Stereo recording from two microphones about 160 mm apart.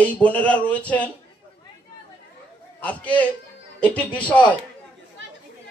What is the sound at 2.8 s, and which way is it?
A man's voice, 10° left (ahead or behind).